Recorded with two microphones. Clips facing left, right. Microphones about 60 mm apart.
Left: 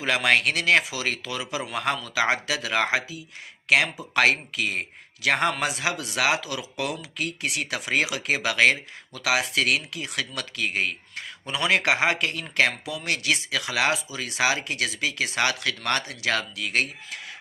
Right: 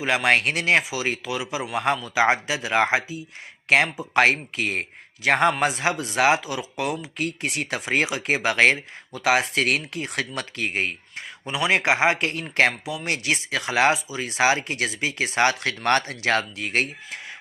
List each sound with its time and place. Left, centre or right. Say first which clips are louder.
0.0 s speech: right 1 dB; right
7.2 s speech: right 2 dB; right
11.4 s speech: right 2 dB; centre; by 12.7 s right
12.8 s speech: right 1 dB; right